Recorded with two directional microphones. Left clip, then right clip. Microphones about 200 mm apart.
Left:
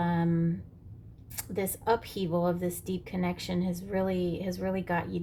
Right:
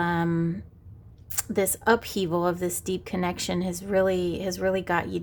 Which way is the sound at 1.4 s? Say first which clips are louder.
Right 8 dB; 45° right (ahead or behind).